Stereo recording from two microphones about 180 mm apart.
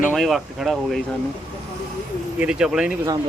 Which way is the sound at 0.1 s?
Centre (ahead or behind).